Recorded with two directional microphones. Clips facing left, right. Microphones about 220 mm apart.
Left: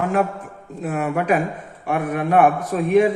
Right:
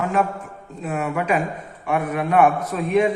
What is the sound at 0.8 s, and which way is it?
A man's voice, 45° left (ahead or behind).